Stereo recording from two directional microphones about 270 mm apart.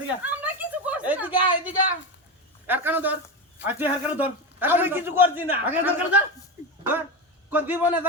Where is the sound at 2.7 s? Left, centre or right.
Centre.